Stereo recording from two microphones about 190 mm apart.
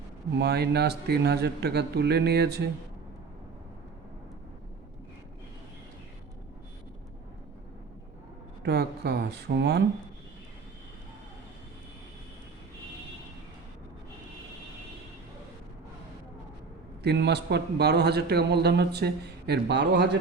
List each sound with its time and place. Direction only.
0.3 s a man's voice: 60° right (ahead or behind)
8.6 s a man's voice: 60° right (ahead or behind)
17.0 s a man's voice: 60° right (ahead or behind)